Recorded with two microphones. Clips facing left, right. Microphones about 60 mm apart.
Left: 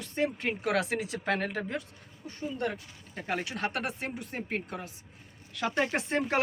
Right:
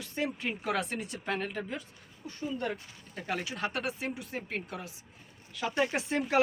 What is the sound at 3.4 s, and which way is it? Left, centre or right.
Speech, left.